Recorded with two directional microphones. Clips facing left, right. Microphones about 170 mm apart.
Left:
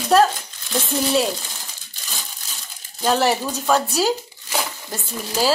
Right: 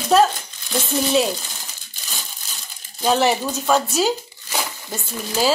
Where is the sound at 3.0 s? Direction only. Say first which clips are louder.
Right 1 dB; centre (ahead or behind).